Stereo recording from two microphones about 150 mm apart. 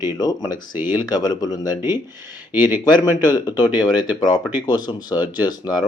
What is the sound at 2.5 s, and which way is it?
Speech, 10° right (ahead or behind).